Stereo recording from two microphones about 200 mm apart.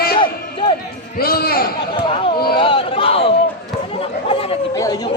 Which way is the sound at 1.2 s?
50° left (ahead or behind).